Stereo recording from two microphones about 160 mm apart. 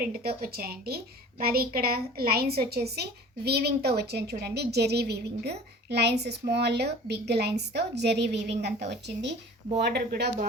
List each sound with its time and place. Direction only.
0.0 s a woman's voice: 70° right (ahead or behind); by 10.3 s 85° right